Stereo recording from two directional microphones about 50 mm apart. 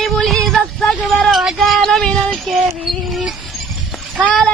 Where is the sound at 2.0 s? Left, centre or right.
Centre.